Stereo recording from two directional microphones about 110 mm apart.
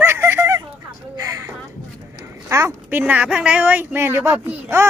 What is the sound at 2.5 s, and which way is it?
Speech, 25° right (ahead or behind).